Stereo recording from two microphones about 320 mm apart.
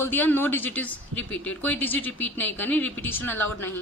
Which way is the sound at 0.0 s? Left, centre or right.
Centre.